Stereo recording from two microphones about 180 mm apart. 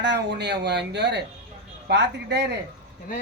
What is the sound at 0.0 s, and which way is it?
Speech, 70° right (ahead or behind).